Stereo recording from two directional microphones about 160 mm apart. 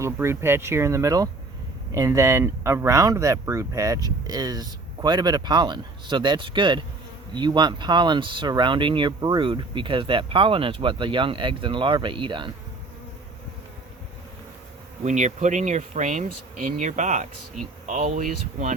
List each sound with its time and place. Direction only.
0.0 s speech: 15° right (ahead or behind); by 12.5 s 30° right (ahead or behind)
15.0 s speech: 50° right (ahead or behind)